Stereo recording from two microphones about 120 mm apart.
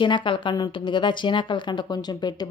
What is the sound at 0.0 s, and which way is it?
A woman's voice, 40° left (ahead or behind).